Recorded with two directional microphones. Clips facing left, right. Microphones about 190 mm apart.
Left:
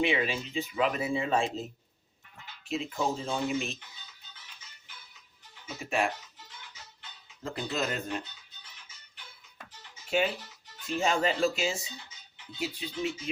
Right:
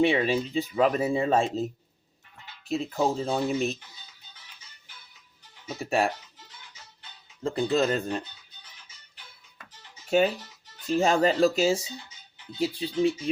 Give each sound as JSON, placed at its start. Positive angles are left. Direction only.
{"t": 0.0, "sound": "speech", "side_deg": -35}
{"t": 2.6, "sound": "speech", "side_deg": -35}
{"t": 5.6, "sound": "speech", "side_deg": -35}
{"t": 7.4, "sound": "speech", "side_deg": -30}
{"t": 10.1, "sound": "speech", "side_deg": -40}